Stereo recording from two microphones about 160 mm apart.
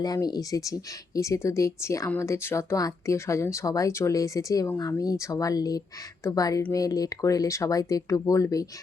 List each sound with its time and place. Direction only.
0.0 s speech: 25° left (ahead or behind)